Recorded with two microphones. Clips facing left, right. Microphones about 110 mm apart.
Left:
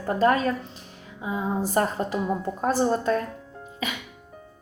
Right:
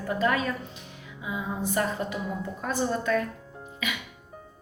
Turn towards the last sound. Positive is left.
turn(degrees=35)  # may be behind; listen again after turning